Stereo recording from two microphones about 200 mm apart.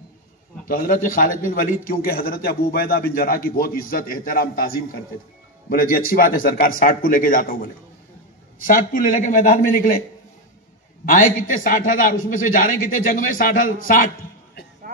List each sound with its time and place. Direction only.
0.7 s a man's voice: 45° left (ahead or behind)
8.6 s speech: 40° left (ahead or behind)
11.1 s speech: 40° left (ahead or behind)